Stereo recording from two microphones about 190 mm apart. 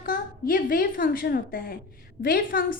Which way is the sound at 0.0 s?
45° left (ahead or behind).